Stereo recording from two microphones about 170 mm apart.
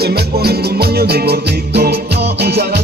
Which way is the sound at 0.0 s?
65° right (ahead or behind).